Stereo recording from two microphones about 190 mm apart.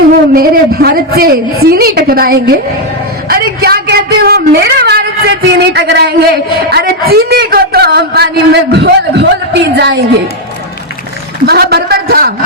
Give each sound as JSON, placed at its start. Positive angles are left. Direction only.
{"t": 0.3, "sound": "a woman's voice", "side_deg": -50}
{"t": 11.4, "sound": "a man's voice", "side_deg": -60}